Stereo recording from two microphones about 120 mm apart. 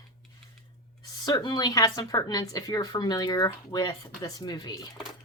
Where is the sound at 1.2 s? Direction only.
35° left (ahead or behind).